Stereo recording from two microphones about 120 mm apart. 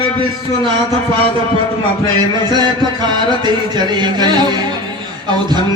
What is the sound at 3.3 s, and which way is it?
Speech, 35° right (ahead or behind).